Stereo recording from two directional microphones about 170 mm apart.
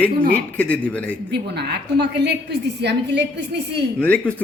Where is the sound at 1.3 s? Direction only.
80° right.